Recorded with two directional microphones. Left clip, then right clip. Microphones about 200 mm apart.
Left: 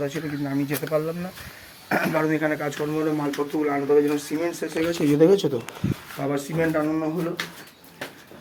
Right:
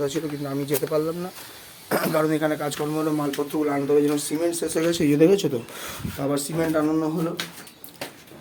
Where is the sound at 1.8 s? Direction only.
5° right (ahead or behind).